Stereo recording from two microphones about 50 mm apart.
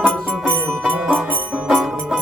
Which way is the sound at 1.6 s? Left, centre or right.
Centre.